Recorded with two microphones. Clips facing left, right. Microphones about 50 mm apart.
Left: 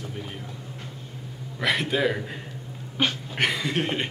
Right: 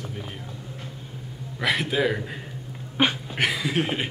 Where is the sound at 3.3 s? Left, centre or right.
Centre.